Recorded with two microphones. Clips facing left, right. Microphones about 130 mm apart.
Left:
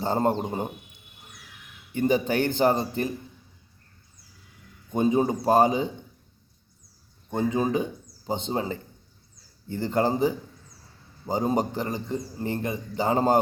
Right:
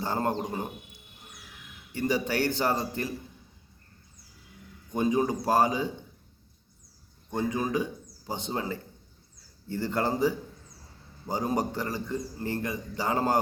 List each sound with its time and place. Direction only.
0.0 s a man's voice: 25° left (ahead or behind)
1.9 s a man's voice: 20° left (ahead or behind)
4.9 s a man's voice: 25° left (ahead or behind)
7.3 s a man's voice: 20° left (ahead or behind)